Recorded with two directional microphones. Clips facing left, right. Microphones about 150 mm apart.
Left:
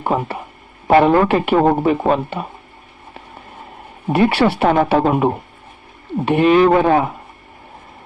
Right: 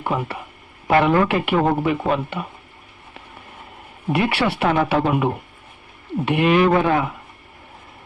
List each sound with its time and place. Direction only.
0.0 s speech: 35° left (ahead or behind)
4.1 s speech: 35° left (ahead or behind)